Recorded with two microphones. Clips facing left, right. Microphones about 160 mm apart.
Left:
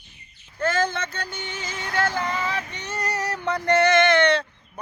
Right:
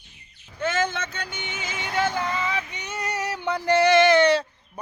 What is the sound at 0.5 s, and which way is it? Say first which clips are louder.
Speech: left 2 dB; 5° right (ahead or behind).